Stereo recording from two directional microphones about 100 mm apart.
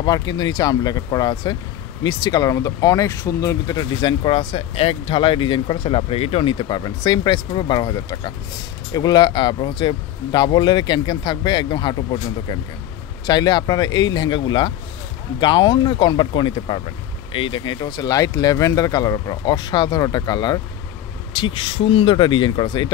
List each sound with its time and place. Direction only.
0.0 s speech: 45° left (ahead or behind)
4.2 s speech: 60° left (ahead or behind); by 20.6 s 40° left (ahead or behind)
21.3 s speech: 60° left (ahead or behind)